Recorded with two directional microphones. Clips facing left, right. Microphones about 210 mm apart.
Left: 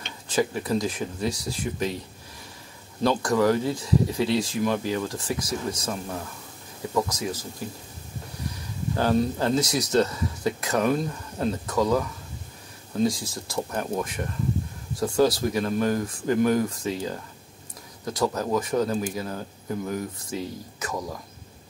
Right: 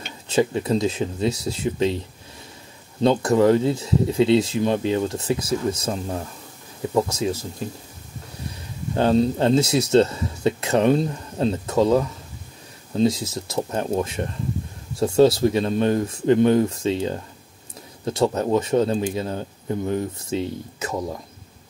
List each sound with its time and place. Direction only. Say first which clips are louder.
0.3 s speech: right 4 dB; 25° right (ahead or behind)
3.0 s speech: right 5 dB; 25° right (ahead or behind)
8.9 s speech: right 5 dB; 25° right (ahead or behind)